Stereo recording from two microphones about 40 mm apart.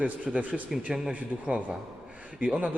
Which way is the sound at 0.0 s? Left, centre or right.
Right.